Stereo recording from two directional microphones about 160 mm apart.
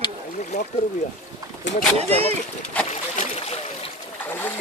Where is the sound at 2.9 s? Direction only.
45° left (ahead or behind).